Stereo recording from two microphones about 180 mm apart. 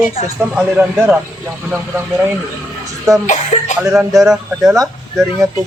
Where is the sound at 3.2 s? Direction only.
40° left (ahead or behind).